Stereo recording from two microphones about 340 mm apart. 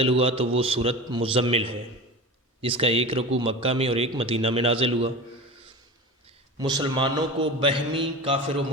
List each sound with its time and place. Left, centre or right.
0.0 s a man's voice: centre
6.2 s a man's voice: centre